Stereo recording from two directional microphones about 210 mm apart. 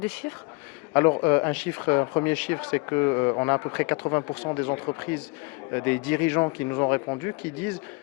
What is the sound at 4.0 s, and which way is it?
Speech, 25° left (ahead or behind).